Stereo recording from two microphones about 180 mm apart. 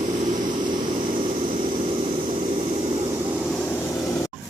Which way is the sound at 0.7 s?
25° right (ahead or behind).